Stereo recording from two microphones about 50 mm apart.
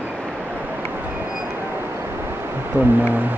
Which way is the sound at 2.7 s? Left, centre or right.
Right.